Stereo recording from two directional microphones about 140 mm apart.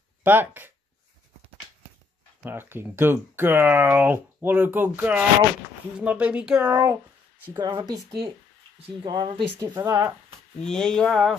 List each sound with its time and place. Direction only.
0.2 s speech: 15° right (ahead or behind)
2.4 s speech: 15° right (ahead or behind)
7.5 s speech: 30° right (ahead or behind)
9.0 s speech: 35° right (ahead or behind)
10.6 s speech: 5° left (ahead or behind)